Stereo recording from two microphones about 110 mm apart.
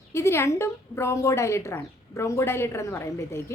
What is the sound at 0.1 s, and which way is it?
A woman's voice, 25° left (ahead or behind).